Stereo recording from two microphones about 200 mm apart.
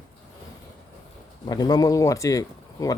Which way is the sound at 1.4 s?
20° left (ahead or behind).